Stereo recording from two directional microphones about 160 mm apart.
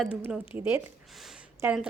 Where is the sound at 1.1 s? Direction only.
Centre (ahead or behind).